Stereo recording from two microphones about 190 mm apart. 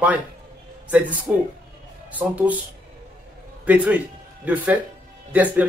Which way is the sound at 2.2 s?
10° right (ahead or behind).